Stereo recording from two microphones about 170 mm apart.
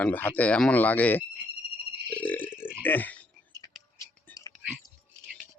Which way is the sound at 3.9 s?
15° left (ahead or behind).